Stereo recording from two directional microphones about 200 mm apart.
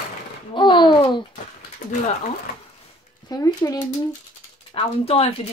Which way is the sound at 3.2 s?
20° left (ahead or behind).